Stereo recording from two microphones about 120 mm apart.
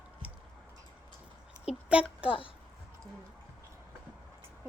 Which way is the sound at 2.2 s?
45° left (ahead or behind).